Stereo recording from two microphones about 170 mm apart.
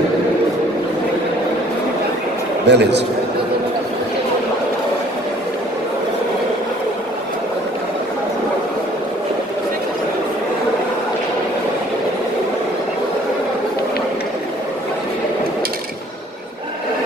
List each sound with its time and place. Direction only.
2.6 s a man's voice: 85° right